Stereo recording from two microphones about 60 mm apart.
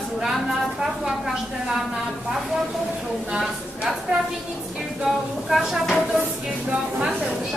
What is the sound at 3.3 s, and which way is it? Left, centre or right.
A woman's voice, centre.